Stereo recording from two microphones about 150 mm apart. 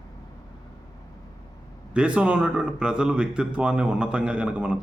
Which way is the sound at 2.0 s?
10° right (ahead or behind).